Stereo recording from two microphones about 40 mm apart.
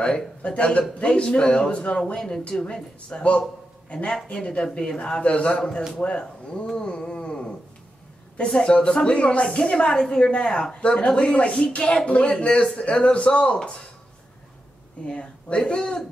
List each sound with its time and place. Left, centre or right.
0.0 s a woman's voice: left
6.8 s a sound: left
8.5 s a woman's voice: left
15.0 s a woman's voice: left